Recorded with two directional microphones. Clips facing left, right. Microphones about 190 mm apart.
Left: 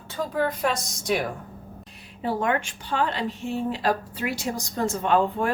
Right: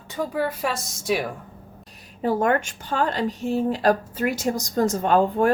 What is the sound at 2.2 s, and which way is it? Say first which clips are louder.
Speech: right 4 dB; 45° right (ahead or behind).